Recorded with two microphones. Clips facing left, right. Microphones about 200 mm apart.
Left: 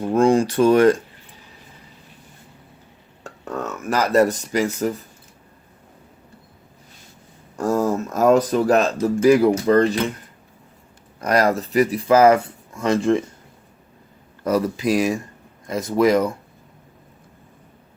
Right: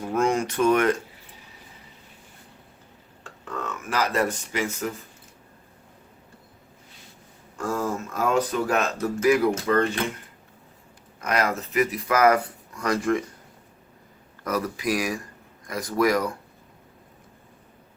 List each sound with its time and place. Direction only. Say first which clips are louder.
0.1 s speech: left 7 dB; 30° left (ahead or behind)
3.2 s speech: left 5 dB; 40° left (ahead or behind)
7.6 s speech: left 7 dB; 40° left (ahead or behind)
11.2 s speech: left 7 dB; 35° left (ahead or behind)
14.4 s speech: left 7 dB; 30° left (ahead or behind)